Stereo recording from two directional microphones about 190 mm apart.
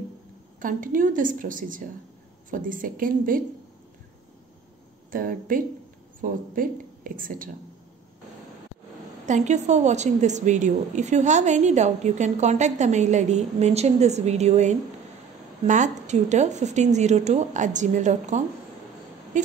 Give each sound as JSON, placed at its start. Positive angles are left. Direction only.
{"t": 0.6, "sound": "a woman's voice", "side_deg": -45}
{"t": 5.1, "sound": "a woman's voice", "side_deg": -45}
{"t": 9.2, "sound": "a woman's voice", "side_deg": -40}